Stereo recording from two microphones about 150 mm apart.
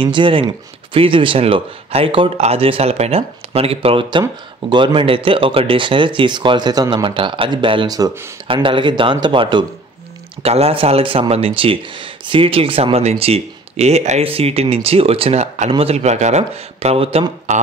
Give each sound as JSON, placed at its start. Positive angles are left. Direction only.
{"t": 0.0, "sound": "speech", "side_deg": -35}